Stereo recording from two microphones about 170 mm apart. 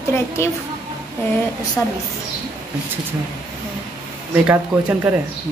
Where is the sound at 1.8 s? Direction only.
15° left (ahead or behind).